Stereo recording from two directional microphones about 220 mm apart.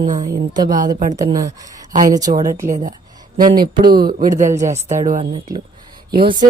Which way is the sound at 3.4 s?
40° right (ahead or behind).